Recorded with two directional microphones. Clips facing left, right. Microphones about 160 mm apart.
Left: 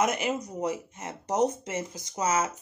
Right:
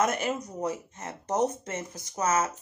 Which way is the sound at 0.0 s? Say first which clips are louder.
Even; 15° left (ahead or behind).